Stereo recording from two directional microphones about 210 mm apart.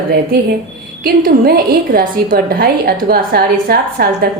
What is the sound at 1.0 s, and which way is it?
A woman's voice, 45° right (ahead or behind).